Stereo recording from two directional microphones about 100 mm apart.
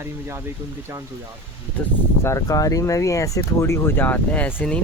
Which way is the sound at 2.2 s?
35° left (ahead or behind).